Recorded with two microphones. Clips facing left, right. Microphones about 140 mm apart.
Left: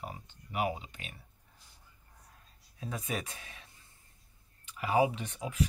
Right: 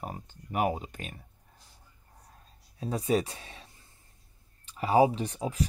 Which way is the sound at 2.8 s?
30° right (ahead or behind).